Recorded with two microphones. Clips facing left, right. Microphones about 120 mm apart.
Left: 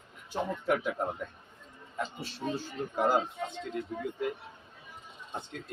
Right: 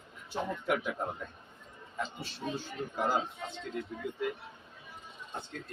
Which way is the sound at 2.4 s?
40° left (ahead or behind).